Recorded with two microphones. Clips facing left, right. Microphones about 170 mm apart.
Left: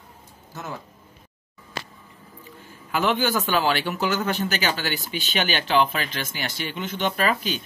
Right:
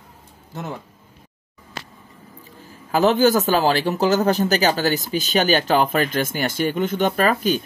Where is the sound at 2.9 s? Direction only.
40° right (ahead or behind).